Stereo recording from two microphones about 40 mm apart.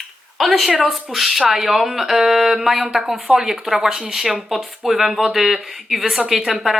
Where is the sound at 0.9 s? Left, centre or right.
Centre.